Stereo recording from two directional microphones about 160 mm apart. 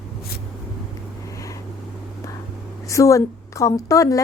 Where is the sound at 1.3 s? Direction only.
20° left (ahead or behind).